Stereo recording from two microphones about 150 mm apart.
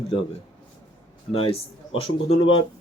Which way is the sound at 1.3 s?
40° left (ahead or behind).